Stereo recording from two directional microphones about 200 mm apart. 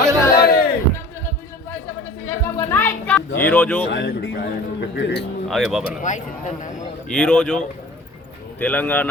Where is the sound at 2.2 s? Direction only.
10° left (ahead or behind).